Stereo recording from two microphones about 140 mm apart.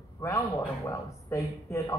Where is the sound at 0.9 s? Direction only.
20° left (ahead or behind).